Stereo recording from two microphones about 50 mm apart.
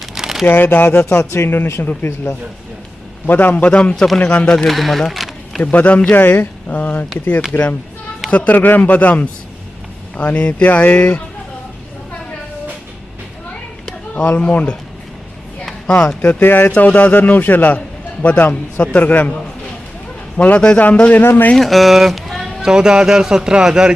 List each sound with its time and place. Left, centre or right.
0.1 s a sound: centre
0.4 s a man's voice: left
1.2 s a man's voice: left
3.9 s speech: centre
5.7 s a man's voice: left
8.3 s a man's voice: left
14.1 s speech: left
15.9 s speech: left
16.4 s speech: left
16.7 s a man's voice: left
20.3 s speech: left
21.5 s speech: centre
22.6 s speech: centre